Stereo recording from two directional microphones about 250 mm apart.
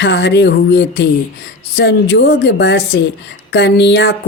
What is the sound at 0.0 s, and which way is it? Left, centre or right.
A woman's voice, left.